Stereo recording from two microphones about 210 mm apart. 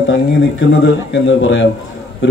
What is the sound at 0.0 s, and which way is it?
A man's voice, 55° left (ahead or behind).